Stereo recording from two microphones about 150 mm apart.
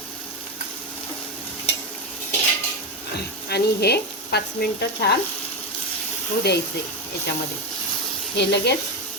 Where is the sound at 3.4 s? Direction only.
90° left.